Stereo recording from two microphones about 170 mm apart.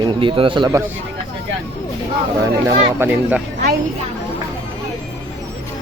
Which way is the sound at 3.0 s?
10° right (ahead or behind).